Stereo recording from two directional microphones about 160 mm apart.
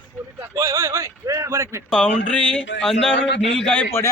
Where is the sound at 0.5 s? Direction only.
20° right (ahead or behind).